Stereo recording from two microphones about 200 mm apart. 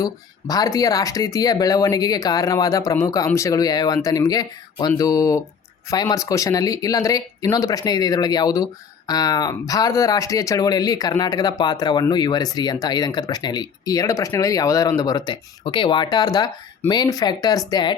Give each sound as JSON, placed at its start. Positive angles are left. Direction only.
{"t": 0.0, "sound": "speech", "side_deg": 20}